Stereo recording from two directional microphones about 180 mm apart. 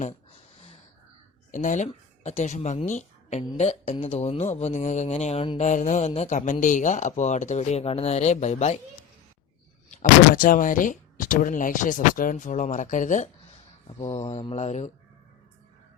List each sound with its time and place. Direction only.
0.0 s a sound: 30° left (ahead or behind)
1.5 s speech: 45° left (ahead or behind)
9.9 s speech: 50° left (ahead or behind)